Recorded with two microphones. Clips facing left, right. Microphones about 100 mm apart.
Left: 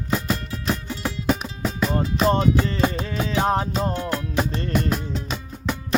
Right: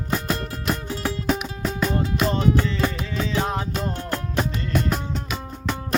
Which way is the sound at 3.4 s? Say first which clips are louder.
Left 6 dB; 45° left (ahead or behind).